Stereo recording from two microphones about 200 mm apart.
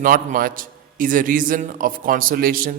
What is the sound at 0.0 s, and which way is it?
A man's voice, 45° right (ahead or behind).